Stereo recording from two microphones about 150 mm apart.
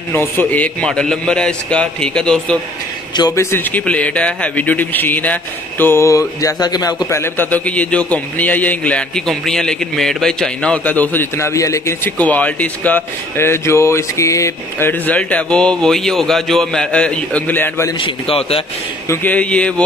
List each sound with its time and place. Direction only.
0.1 s a man's voice: 15° left (ahead or behind)
3.2 s a man's voice: 25° left (ahead or behind)
3.5 s a man's voice: 10° left (ahead or behind)
7.1 s a man's voice: 15° left (ahead or behind)
17.9 s a man's voice: 35° left (ahead or behind)
19.0 s a man's voice: 10° left (ahead or behind)